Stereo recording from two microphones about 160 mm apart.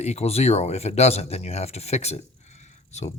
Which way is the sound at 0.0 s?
45° left (ahead or behind).